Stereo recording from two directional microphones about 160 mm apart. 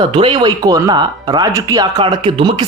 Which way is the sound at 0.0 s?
30° right (ahead or behind).